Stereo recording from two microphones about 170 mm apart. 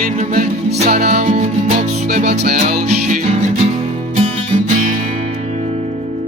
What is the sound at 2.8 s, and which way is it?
Music, 45° right (ahead or behind).